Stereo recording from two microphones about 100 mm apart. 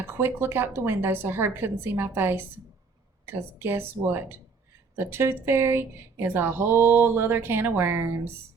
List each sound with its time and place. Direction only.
0.1 s a woman's voice: 25° right (ahead or behind)